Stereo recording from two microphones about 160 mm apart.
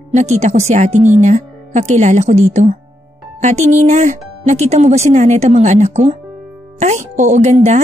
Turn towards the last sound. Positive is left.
turn(degrees=-45)  # may be behind; listen again after turning